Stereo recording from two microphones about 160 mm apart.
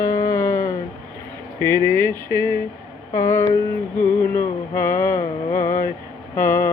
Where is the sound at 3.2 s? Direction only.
15° left (ahead or behind).